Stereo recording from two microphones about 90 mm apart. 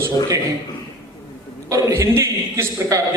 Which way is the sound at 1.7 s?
35° right (ahead or behind).